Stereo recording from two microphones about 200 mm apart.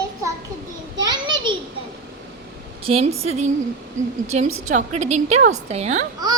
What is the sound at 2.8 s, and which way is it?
Speech, 30° right (ahead or behind).